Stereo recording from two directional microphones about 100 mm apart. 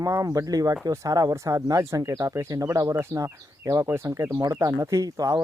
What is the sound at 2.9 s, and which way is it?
Speech, 25° right (ahead or behind).